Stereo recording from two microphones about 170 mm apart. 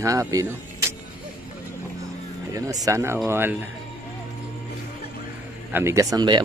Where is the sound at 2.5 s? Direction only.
20° right (ahead or behind).